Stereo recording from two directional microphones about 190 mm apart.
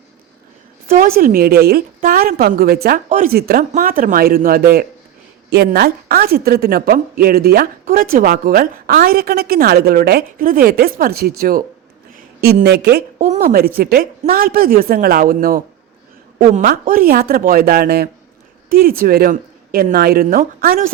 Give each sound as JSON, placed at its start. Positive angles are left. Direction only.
{"t": 0.9, "sound": "a woman's voice", "side_deg": -45}
{"t": 13.1, "sound": "a woman's voice", "side_deg": -40}